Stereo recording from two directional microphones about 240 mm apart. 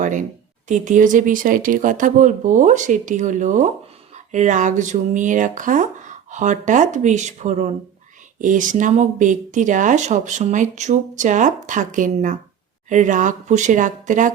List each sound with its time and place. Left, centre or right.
0.0 s speech: right